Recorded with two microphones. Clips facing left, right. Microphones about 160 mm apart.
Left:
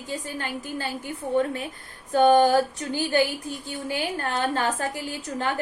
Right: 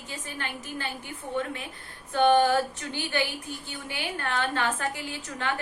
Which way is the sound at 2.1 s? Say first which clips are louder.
Left 4 dB; 35° left (ahead or behind).